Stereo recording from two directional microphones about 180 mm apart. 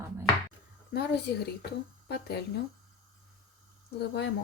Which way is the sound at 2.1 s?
65° left (ahead or behind).